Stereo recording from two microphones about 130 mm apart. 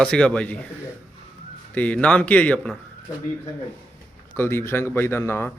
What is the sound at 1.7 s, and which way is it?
A man's voice, 10° left (ahead or behind).